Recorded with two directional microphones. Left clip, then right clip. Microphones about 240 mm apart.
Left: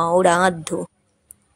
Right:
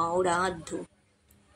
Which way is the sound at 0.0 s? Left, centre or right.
Left.